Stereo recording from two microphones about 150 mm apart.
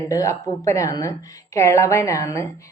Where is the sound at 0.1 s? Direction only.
20° left (ahead or behind).